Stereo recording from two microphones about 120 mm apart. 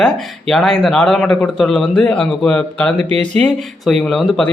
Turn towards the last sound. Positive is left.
turn(degrees=5)  # may be behind; listen again after turning